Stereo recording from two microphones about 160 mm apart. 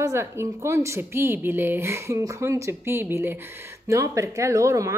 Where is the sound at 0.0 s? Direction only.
15° right (ahead or behind).